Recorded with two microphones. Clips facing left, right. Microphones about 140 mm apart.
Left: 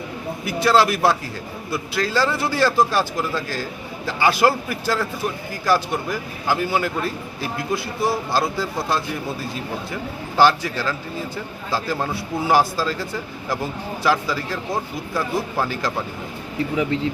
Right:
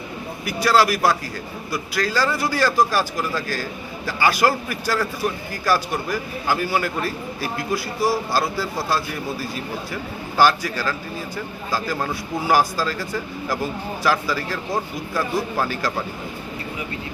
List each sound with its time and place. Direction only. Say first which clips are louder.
0.4 s a man's voice: left 1 dB; 25° left (ahead or behind)
10.3 s a man's voice: left 1 dB; 20° left (ahead or behind)
12.1 s a man's voice: left 1 dB; 25° left (ahead or behind)